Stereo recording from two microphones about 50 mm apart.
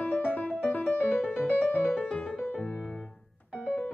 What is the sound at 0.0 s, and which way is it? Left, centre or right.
Music, left.